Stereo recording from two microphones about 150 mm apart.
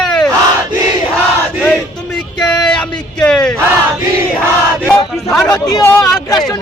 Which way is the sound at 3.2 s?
5° left (ahead or behind).